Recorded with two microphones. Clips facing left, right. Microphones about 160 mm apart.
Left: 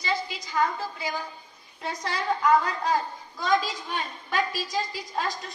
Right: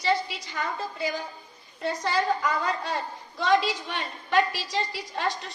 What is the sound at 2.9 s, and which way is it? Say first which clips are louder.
A woman's voice: left 4 dB; 75° right (ahead or behind).